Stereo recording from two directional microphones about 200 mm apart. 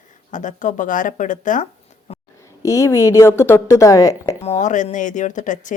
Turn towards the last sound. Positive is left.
turn(degrees=40)  # may be behind; listen again after turning